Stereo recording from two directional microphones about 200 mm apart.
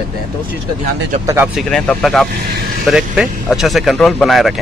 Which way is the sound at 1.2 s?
10° right (ahead or behind).